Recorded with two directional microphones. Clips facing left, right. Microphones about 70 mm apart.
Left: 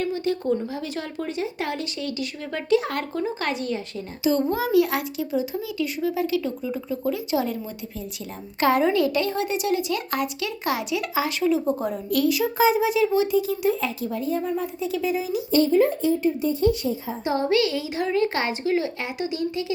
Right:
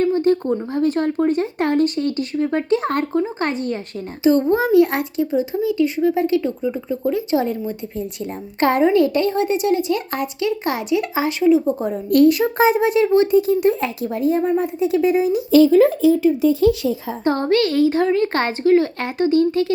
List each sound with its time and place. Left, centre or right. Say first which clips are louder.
0.0 s a sound: right 8 dB; right
0.7 s speech: right 12 dB; right
2.4 s speech: right 3 dB; right
8.6 s a woman's voice: right 5 dB; right
12.1 s speech: right 8 dB; right
15.7 s speech: right 6 dB; right
17.2 s speech: right 4 dB; right